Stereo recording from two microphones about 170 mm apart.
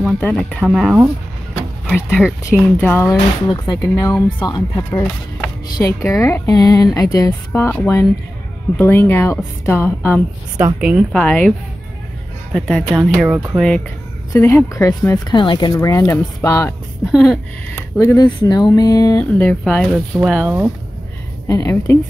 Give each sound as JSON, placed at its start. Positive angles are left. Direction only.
{"t": 0.0, "sound": "speech", "side_deg": 5}
{"t": 2.8, "sound": "speech", "side_deg": 15}
{"t": 10.8, "sound": "speech", "side_deg": -5}
{"t": 11.1, "sound": "speech", "side_deg": 10}
{"t": 12.5, "sound": "speech", "side_deg": 5}
{"t": 14.3, "sound": "speech", "side_deg": 15}
{"t": 17.0, "sound": "speech", "side_deg": 0}
{"t": 17.7, "sound": "speech", "side_deg": 20}
{"t": 20.2, "sound": "speech", "side_deg": -5}
{"t": 21.5, "sound": "speech", "side_deg": 20}